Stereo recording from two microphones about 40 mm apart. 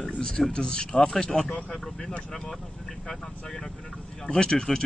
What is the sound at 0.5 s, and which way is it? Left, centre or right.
Speech, left.